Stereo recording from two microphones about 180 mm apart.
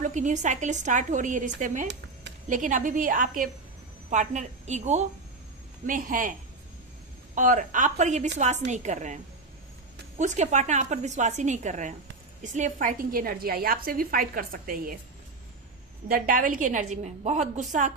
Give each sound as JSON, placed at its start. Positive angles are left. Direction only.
{"t": 0.0, "sound": "a woman's voice", "side_deg": -45}
{"t": 7.3, "sound": "a woman's voice", "side_deg": -45}
{"t": 16.0, "sound": "a woman's voice", "side_deg": -55}